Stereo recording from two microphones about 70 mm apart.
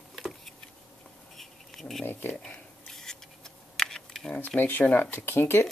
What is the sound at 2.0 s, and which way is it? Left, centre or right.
Speech, left.